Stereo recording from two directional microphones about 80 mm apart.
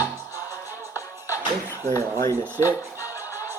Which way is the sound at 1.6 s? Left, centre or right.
Left.